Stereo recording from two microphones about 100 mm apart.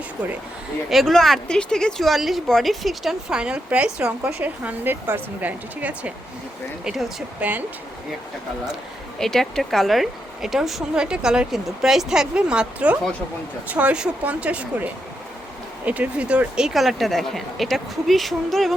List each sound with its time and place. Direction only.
0.9 s speech: centre (ahead or behind)
6.8 s speech: centre (ahead or behind)
7.3 s speech: 15° right (ahead or behind)
9.1 s speech: 5° left (ahead or behind); by 14.8 s 10° right (ahead or behind)
15.9 s speech: 15° right (ahead or behind)